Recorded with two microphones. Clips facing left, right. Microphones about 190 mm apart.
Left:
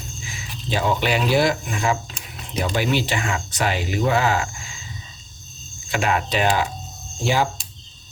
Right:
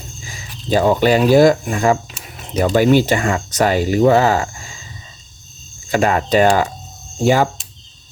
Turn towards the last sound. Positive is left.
turn(degrees=-50)  # may be behind; listen again after turning